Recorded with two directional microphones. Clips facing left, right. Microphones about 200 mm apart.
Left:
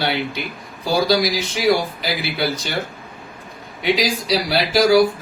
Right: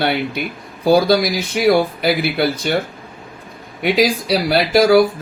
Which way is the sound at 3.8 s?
55° right (ahead or behind).